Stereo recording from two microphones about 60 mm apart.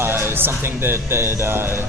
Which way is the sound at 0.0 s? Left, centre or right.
Right.